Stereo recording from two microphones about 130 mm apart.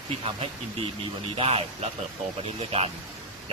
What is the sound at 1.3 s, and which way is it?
Speech, 50° right (ahead or behind).